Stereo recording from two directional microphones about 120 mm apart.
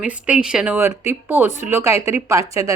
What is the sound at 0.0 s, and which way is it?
Speech, 10° right (ahead or behind).